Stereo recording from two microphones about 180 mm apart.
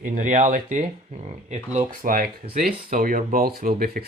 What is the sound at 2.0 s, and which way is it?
Speech, 50° right (ahead or behind).